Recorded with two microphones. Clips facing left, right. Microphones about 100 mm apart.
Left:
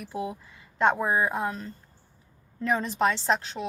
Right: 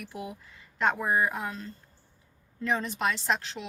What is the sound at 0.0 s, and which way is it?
A woman's voice, 25° left (ahead or behind).